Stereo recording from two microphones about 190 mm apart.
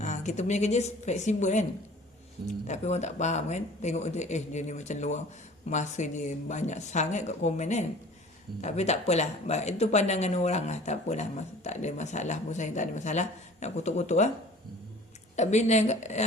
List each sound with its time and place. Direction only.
0.0 s speech: 40° left (ahead or behind)
15.4 s speech: 35° left (ahead or behind)